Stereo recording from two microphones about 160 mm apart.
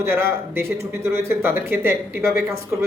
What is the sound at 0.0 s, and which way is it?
Speech, 15° right (ahead or behind).